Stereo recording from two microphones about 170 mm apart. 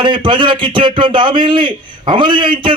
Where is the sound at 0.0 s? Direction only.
30° right (ahead or behind).